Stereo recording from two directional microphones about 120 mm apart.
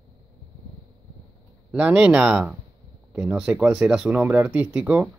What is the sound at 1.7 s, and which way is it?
Speech, 10° right (ahead or behind).